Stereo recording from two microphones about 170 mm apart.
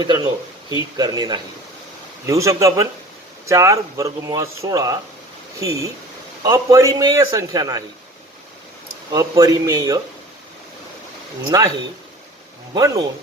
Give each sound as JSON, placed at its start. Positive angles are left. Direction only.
{"t": 0.0, "sound": "speech", "side_deg": -25}
{"t": 9.1, "sound": "speech", "side_deg": -20}
{"t": 11.5, "sound": "speech", "side_deg": -20}
{"t": 12.7, "sound": "speech", "side_deg": -20}